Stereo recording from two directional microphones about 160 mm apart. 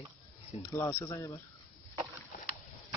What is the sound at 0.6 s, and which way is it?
Speech, 15° left (ahead or behind).